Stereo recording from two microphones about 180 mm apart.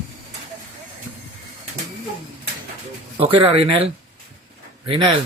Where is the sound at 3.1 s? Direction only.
30° right (ahead or behind).